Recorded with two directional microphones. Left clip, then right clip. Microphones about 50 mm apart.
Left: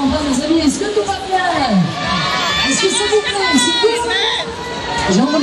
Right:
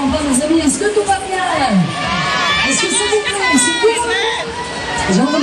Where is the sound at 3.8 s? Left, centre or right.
Centre.